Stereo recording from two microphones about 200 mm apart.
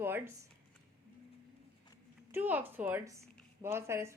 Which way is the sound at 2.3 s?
10° right (ahead or behind).